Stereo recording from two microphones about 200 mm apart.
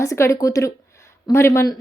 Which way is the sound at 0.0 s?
15° left (ahead or behind).